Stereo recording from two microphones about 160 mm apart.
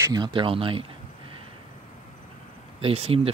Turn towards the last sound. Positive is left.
turn(degrees=-40)  # may be behind; listen again after turning